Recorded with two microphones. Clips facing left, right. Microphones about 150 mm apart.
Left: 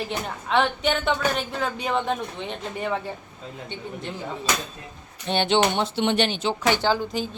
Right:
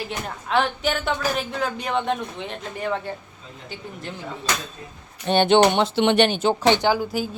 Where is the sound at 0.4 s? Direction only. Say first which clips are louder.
Even; centre (ahead or behind).